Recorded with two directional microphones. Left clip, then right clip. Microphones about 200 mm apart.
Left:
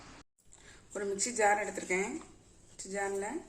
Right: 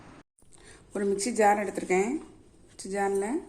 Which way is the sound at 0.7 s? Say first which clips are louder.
Right 7 dB; 35° right (ahead or behind).